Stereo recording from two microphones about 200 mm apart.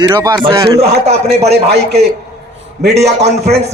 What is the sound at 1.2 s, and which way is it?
A man's voice, 55° right (ahead or behind).